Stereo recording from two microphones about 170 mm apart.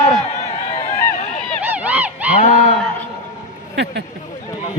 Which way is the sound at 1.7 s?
10° right (ahead or behind).